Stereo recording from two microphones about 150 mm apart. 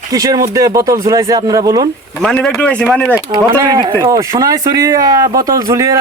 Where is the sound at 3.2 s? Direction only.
25° right (ahead or behind).